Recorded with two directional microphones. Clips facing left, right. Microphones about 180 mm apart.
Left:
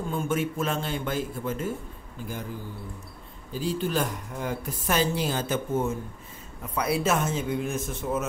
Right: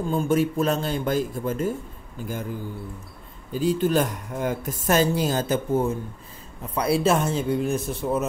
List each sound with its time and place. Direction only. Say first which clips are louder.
0.1 s a man's voice: right 6 dB; 35° right (ahead or behind)
3.5 s a man's voice: right 6 dB; 45° right (ahead or behind)